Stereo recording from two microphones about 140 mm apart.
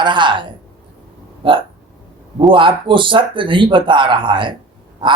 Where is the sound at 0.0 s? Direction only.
35° right (ahead or behind).